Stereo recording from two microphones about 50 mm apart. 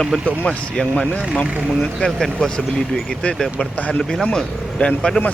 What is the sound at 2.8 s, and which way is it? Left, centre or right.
Speech, centre.